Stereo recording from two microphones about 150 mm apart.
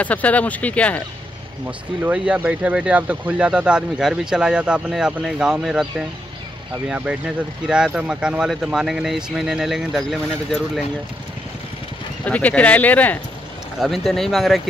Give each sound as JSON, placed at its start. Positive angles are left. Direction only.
{"t": 0.0, "sound": "speech", "side_deg": 10}
{"t": 2.0, "sound": "speech", "side_deg": -10}
{"t": 12.3, "sound": "speech", "side_deg": 10}